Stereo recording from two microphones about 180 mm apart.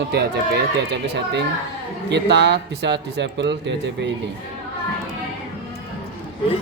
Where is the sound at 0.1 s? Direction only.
65° right (ahead or behind).